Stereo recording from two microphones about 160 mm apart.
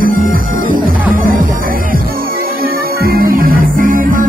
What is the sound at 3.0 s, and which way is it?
Music, 65° right (ahead or behind).